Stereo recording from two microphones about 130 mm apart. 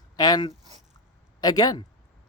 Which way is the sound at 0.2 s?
30° left (ahead or behind).